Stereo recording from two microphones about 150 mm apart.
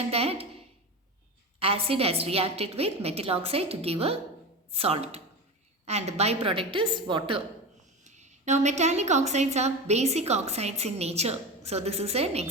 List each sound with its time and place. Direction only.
0.1 s a woman's voice: 40° right (ahead or behind)
1.5 s a woman's voice: 40° right (ahead or behind)
8.0 s a woman's voice: 50° right (ahead or behind)